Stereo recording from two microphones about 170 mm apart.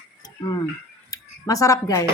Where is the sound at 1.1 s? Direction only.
20° left (ahead or behind).